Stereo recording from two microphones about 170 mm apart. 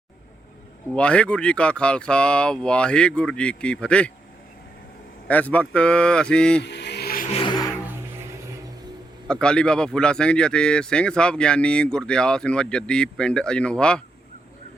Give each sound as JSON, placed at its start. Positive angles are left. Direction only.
{"t": 0.9, "sound": "speech", "side_deg": 5}
{"t": 5.3, "sound": "speech", "side_deg": 10}
{"t": 6.6, "sound": "a sound", "side_deg": 85}
{"t": 7.3, "sound": "music", "side_deg": 35}
{"t": 7.9, "sound": "music", "side_deg": -15}
{"t": 9.2, "sound": "speech", "side_deg": 5}